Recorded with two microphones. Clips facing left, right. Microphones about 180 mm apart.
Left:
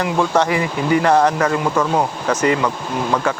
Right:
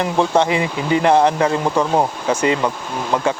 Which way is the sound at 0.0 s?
25° right (ahead or behind).